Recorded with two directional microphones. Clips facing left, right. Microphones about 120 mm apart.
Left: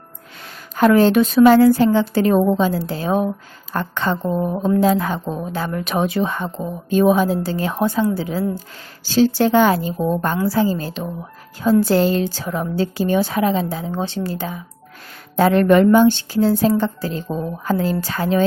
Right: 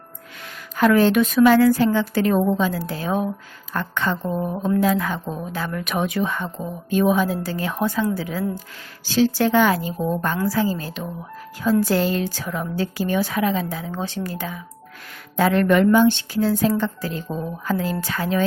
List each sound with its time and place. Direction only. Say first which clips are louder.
0.8 s a woman's voice: left 3 dB; 30° left (ahead or behind)